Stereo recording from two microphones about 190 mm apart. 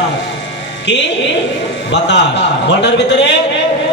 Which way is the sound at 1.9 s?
65° left (ahead or behind).